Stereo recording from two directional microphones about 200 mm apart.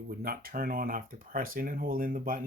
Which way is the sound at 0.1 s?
45° right (ahead or behind).